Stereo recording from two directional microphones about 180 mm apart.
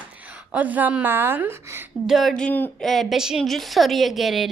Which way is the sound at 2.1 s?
Centre (ahead or behind).